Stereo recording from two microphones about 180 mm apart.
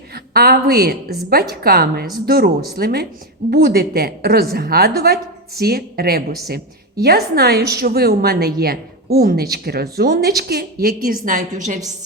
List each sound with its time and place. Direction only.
0.1 s a woman's voice: 60° right (ahead or behind)